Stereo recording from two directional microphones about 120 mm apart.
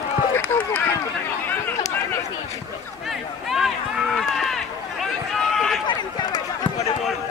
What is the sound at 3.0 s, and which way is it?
Run, centre (ahead or behind).